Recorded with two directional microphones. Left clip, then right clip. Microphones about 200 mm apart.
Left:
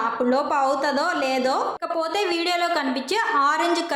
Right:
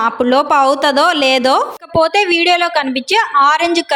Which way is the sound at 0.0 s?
45° right (ahead or behind).